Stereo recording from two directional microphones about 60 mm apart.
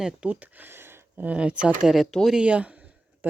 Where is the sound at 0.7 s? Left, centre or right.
Right.